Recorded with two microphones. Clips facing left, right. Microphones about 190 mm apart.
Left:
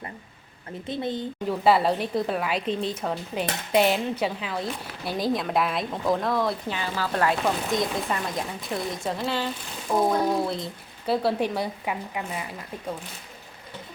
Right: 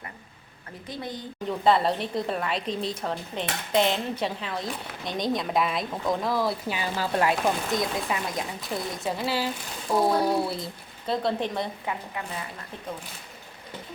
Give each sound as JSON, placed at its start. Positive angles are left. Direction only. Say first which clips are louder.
{"t": 0.9, "sound": "a woman's voice", "louder": "left 6 dB", "side_deg": 25}
{"t": 1.5, "sound": "speech", "louder": "left 1 dB", "side_deg": 5}
{"t": 7.7, "sound": "speech", "louder": "left 1 dB", "side_deg": 0}
{"t": 11.0, "sound": "speech", "louder": "left 3 dB", "side_deg": 5}